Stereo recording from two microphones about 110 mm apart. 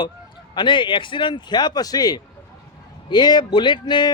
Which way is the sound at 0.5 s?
45° left (ahead or behind).